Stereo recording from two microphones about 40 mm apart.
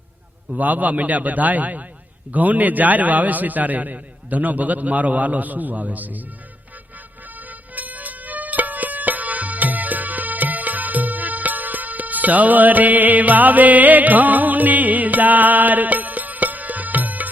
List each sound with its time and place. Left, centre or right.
0.5 s a man's voice: right
7.3 s music: right